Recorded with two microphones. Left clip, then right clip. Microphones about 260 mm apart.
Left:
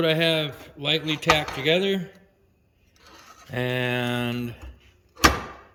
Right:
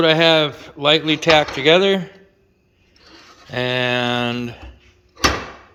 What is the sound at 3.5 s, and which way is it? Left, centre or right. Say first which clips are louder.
Speech: right 7 dB; centre.